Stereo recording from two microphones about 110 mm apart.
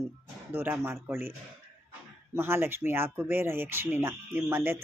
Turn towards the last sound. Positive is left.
turn(degrees=-20)  # may be behind; listen again after turning